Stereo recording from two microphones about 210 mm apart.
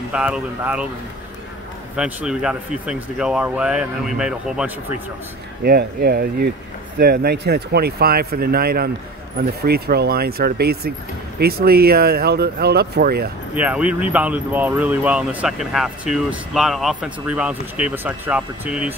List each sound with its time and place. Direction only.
0.1 s speech: 5° right (ahead or behind)
2.0 s speech: 5° right (ahead or behind)
5.6 s speech: 45° right (ahead or behind)
13.6 s speech: 5° right (ahead or behind)